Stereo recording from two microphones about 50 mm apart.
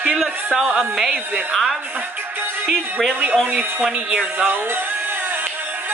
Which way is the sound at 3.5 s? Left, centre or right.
Right.